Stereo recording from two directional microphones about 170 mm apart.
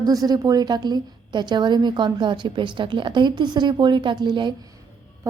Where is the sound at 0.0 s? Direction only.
20° right (ahead or behind).